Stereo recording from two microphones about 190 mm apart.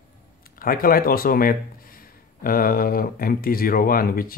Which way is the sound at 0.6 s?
50° left (ahead or behind).